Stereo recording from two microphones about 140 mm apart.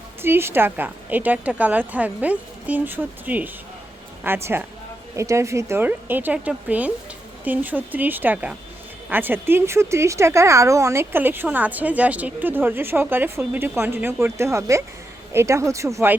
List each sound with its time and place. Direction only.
0.2 s speech: 15° right (ahead or behind)